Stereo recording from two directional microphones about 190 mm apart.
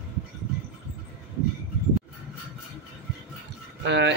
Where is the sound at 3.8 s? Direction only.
65° right (ahead or behind).